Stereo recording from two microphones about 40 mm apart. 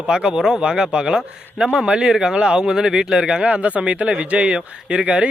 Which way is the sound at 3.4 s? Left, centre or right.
Right.